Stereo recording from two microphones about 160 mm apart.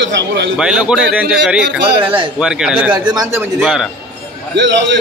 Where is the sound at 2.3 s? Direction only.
5° right (ahead or behind).